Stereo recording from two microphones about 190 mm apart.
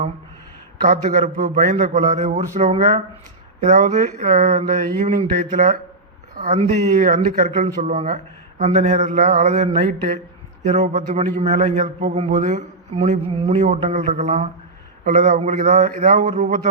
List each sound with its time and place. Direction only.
0.9 s a man's voice: 40° right (ahead or behind)